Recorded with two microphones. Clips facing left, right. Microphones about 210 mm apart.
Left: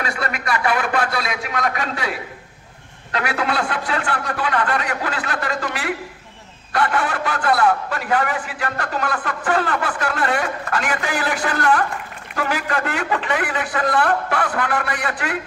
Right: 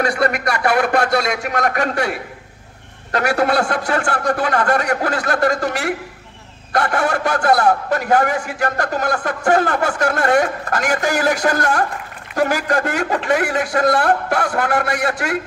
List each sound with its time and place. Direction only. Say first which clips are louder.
0.0 s a man's voice: right 7 dB; 45° right (ahead or behind)